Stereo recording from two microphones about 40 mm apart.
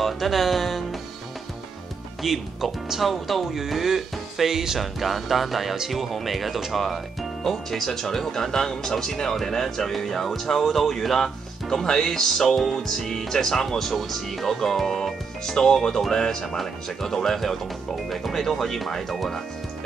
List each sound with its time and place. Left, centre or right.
0.0 s speech: centre
2.2 s speech: centre
7.4 s speech: centre